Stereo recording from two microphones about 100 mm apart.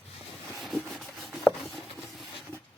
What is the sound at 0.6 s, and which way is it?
Rub, centre (ahead or behind).